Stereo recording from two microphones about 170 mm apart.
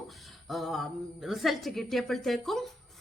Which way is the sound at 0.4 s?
Centre (ahead or behind).